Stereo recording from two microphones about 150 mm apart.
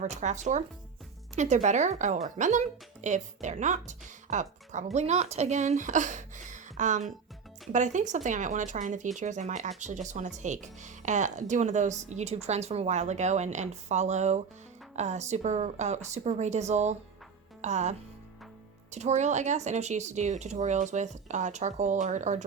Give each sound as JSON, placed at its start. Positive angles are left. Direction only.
{"t": 0.0, "sound": "speech", "side_deg": -50}